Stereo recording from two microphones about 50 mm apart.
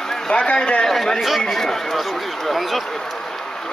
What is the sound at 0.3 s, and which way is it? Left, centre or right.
Speech, centre.